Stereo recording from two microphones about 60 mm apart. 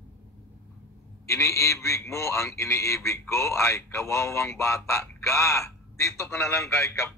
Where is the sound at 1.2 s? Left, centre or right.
Left.